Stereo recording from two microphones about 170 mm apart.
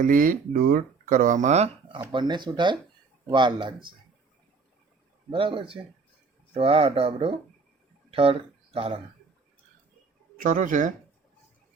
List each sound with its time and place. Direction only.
0.0 s speech: 55° right (ahead or behind); by 2.0 s 40° right (ahead or behind)
2.1 s speech: 25° right (ahead or behind)
5.3 s speech: 30° right (ahead or behind)
10.4 s speech: 50° right (ahead or behind)